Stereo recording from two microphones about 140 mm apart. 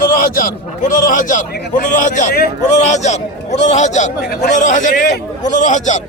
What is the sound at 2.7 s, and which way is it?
A man's voice, 55° left (ahead or behind).